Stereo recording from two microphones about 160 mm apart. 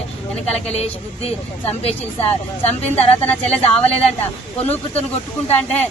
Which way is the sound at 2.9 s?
10° left (ahead or behind).